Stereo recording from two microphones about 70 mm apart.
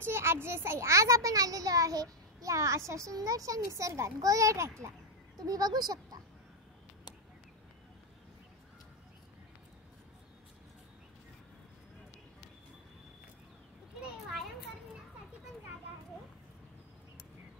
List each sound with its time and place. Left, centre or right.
0.0 s a child's voice: right
5.4 s speech: right